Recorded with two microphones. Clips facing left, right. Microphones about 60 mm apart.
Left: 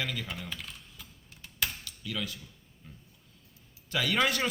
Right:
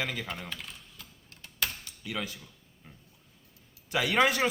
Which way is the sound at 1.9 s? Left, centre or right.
Right.